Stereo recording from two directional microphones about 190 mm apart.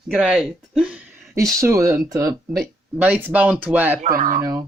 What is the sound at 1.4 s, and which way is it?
Speech, 15° right (ahead or behind).